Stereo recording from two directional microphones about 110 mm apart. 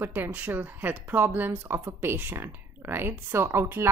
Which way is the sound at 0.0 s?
20° right (ahead or behind).